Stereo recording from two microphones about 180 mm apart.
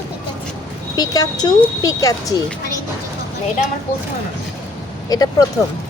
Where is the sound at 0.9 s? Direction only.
20° left (ahead or behind).